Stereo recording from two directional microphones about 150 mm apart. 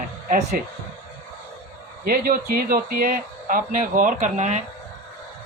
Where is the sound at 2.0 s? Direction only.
75° right (ahead or behind); by 4.6 s 50° right (ahead or behind).